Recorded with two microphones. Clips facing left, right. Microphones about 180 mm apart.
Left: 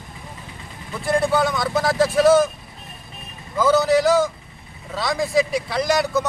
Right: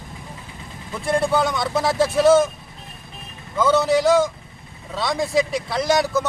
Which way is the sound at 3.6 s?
Centre (ahead or behind).